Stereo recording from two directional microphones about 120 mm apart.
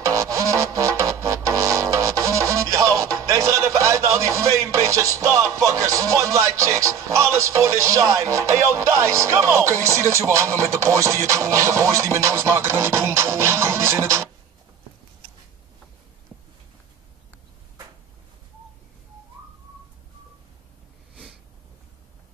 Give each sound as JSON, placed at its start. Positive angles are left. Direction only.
{"t": 0.0, "sound": "music", "side_deg": -25}